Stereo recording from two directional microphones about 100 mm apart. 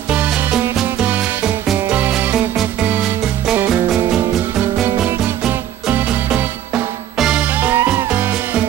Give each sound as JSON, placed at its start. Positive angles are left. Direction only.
{"t": 0.1, "sound": "music", "side_deg": -15}
{"t": 4.8, "sound": "music", "side_deg": -20}
{"t": 7.8, "sound": "music", "side_deg": -30}
{"t": 8.1, "sound": "music", "side_deg": -15}